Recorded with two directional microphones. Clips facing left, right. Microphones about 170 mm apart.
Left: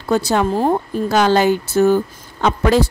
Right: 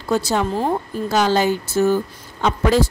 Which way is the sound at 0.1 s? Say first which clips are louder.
Left 3 dB; 60° left (ahead or behind).